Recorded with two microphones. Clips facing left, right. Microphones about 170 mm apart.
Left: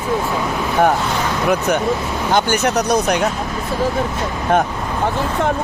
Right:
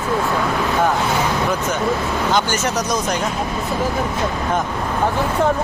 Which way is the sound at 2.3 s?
60° left (ahead or behind).